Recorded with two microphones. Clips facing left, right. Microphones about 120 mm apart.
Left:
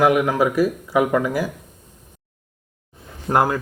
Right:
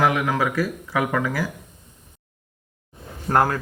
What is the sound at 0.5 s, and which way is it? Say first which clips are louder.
Speech: left 5 dB; 15° left (ahead or behind).